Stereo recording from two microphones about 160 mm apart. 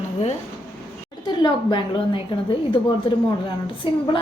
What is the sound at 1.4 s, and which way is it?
Speech, 30° left (ahead or behind).